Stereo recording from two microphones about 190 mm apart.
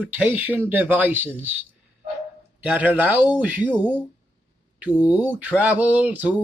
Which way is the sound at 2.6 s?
10° right (ahead or behind).